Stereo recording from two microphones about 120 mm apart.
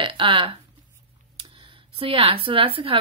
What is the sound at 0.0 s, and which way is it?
Speech, 45° right (ahead or behind).